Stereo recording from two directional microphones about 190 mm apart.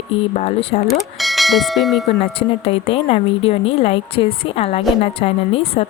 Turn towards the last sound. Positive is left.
turn(degrees=30)  # may be behind; listen again after turning